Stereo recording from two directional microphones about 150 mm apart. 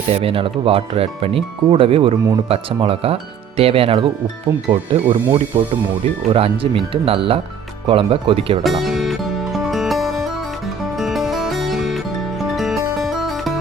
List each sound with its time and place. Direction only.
0.1 s speech: 40° right (ahead or behind)
8.6 s music: centre (ahead or behind)
13.0 s music: centre (ahead or behind)